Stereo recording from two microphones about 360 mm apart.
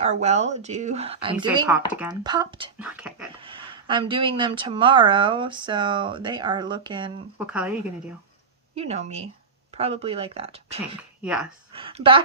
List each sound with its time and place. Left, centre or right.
0.0 s speech: centre
1.5 s speech: centre
3.4 s speech: centre
8.7 s speech: centre
11.2 s speech: centre
11.7 s speech: centre